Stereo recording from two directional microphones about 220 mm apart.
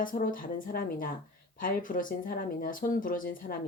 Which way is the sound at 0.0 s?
40° left (ahead or behind).